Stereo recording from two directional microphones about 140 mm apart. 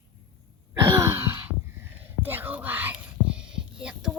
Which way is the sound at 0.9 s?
15° right (ahead or behind).